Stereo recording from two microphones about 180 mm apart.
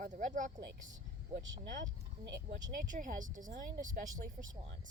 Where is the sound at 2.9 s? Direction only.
45° right (ahead or behind).